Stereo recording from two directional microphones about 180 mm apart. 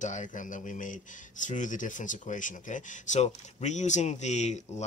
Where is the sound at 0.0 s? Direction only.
45° left (ahead or behind).